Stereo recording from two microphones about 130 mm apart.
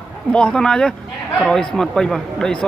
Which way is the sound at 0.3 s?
5° left (ahead or behind).